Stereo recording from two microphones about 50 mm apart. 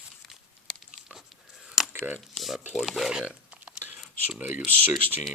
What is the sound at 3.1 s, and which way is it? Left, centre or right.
Speech, centre.